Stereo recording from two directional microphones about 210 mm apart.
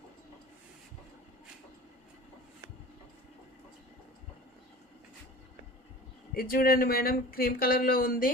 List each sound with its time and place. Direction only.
6.3 s speech: 45° left (ahead or behind)